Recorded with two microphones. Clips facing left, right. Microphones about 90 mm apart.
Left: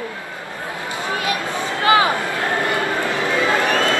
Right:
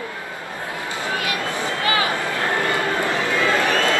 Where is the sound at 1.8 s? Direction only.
30° left (ahead or behind).